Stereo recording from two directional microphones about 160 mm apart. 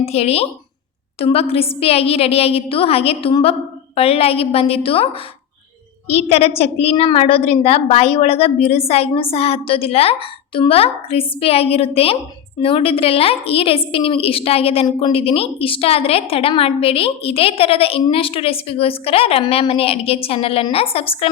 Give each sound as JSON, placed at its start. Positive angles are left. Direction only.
{"t": 0.0, "sound": "a woman's voice", "side_deg": 40}
{"t": 6.1, "sound": "a woman's voice", "side_deg": 40}